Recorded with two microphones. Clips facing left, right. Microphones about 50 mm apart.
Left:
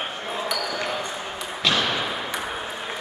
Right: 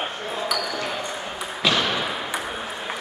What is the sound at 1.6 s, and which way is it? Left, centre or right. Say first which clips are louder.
Arrow: right 1 dB; centre.